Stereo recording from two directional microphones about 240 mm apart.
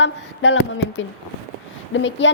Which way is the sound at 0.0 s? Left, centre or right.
Left.